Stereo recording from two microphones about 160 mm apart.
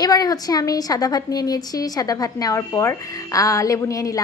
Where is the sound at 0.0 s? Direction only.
25° left (ahead or behind).